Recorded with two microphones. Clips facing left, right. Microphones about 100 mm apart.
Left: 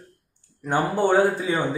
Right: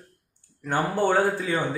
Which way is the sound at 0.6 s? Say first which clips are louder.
Left 2 dB; 15° left (ahead or behind).